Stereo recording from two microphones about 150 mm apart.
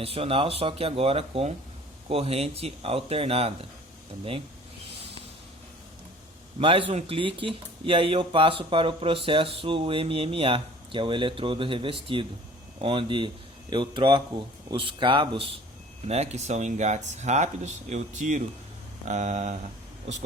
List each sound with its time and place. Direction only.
0.0 s speech: 40° right (ahead or behind)
6.6 s speech: 35° right (ahead or behind); by 19.5 s 50° right (ahead or behind)